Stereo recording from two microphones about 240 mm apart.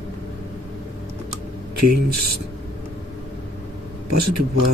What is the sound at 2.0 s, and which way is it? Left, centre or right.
Speech, right.